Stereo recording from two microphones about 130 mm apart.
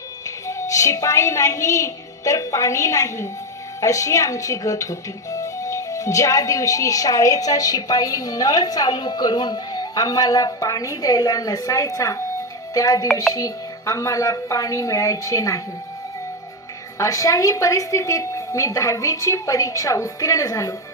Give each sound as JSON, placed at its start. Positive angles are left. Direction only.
{"t": 0.4, "sound": "speech", "side_deg": 25}
{"t": 17.0, "sound": "speech", "side_deg": 25}